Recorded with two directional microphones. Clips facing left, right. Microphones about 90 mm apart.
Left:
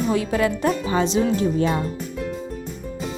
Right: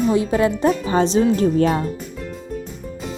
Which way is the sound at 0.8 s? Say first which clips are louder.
Right 3 dB; 35° right (ahead or behind).